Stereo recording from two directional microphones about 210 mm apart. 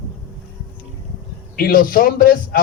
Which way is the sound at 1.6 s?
45° left (ahead or behind).